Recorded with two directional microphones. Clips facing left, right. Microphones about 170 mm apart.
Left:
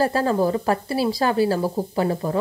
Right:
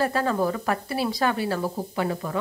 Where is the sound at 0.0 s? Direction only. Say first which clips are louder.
Left 4 dB; 35° left (ahead or behind).